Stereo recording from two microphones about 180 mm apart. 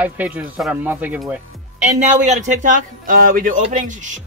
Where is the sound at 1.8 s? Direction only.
40° right (ahead or behind).